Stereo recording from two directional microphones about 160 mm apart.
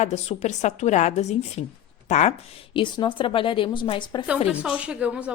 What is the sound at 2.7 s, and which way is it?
A woman's voice, 30° left (ahead or behind).